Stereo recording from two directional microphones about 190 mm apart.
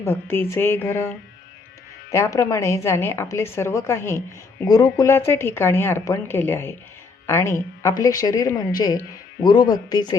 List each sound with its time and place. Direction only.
0.0 s speech: 10° left (ahead or behind)